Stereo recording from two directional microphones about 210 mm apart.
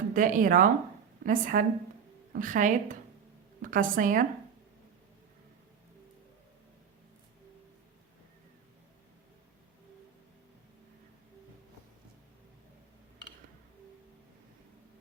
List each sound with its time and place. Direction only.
0.1 s a woman's voice: 40° right (ahead or behind)